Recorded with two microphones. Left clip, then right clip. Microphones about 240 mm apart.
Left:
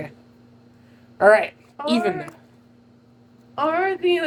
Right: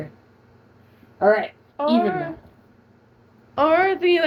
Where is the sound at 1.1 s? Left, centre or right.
Left.